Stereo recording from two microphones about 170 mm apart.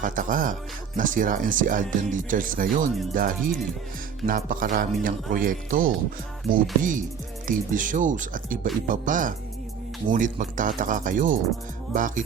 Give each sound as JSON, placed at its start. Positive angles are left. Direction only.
{"t": 0.0, "sound": "speech", "side_deg": -55}
{"t": 3.2, "sound": "music", "side_deg": -55}
{"t": 4.3, "sound": "speech", "side_deg": -55}